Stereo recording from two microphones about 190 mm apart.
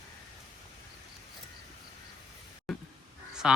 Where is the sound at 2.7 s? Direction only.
Centre (ahead or behind).